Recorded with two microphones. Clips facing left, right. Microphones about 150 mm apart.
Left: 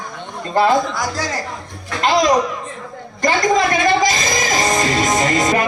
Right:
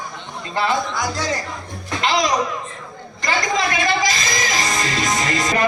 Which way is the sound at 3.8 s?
45° left (ahead or behind).